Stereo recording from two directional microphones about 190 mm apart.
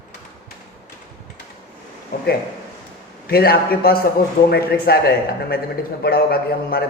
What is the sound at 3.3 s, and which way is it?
A man's voice, 55° left (ahead or behind).